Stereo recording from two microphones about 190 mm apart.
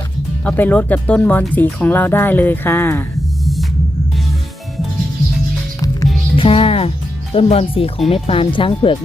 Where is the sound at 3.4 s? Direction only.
Centre (ahead or behind).